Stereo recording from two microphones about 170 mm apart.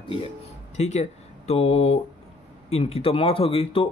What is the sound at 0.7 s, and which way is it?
Speech, 40° left (ahead or behind).